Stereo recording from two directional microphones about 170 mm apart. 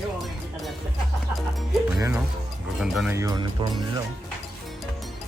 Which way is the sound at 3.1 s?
20° right (ahead or behind).